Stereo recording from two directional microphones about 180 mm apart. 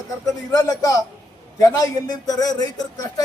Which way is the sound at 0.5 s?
20° left (ahead or behind).